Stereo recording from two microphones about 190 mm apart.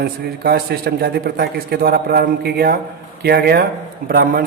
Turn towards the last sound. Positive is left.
turn(degrees=-50)  # may be behind; listen again after turning